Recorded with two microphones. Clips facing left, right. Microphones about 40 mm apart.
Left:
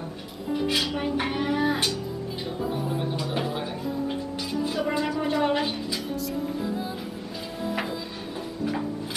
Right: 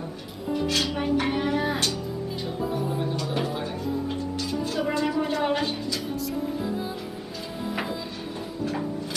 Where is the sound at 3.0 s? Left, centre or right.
Centre.